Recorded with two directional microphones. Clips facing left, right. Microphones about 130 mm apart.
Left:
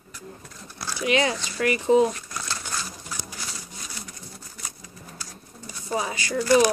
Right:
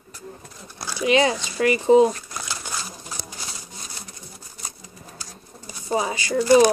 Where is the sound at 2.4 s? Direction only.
10° right (ahead or behind).